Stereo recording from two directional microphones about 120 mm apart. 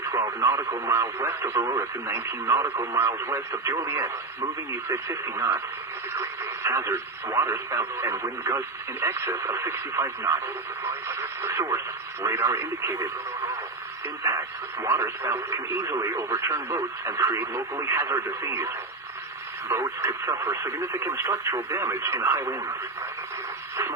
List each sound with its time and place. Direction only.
0.0 s speech: 20° right (ahead or behind)